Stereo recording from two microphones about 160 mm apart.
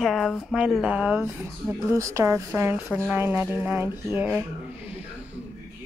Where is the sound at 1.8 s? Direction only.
20° right (ahead or behind).